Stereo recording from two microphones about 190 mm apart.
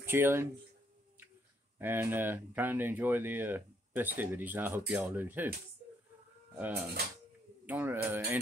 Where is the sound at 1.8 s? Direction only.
10° right (ahead or behind).